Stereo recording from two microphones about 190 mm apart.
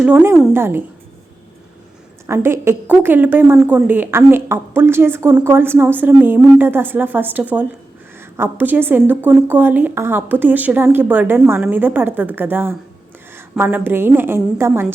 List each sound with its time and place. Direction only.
0.0 s a woman's voice: 10° right (ahead or behind)
2.2 s a woman's voice: 15° right (ahead or behind)